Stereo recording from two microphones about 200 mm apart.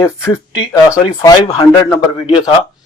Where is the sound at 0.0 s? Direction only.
15° left (ahead or behind).